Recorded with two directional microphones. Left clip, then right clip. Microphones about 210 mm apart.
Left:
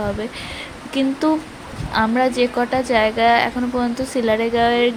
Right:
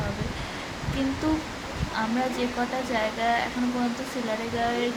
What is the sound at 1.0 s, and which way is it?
A woman's voice, 40° left (ahead or behind).